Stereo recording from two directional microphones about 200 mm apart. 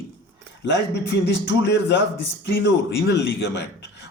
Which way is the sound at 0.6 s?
60° left (ahead or behind).